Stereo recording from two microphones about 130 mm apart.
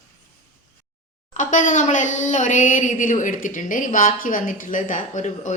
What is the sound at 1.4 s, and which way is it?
Speech, 75° left (ahead or behind).